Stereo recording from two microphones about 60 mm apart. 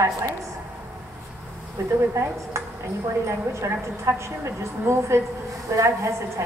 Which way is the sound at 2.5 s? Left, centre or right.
Right.